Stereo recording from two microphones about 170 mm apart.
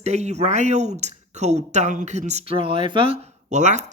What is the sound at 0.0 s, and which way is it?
Speech, 40° right (ahead or behind).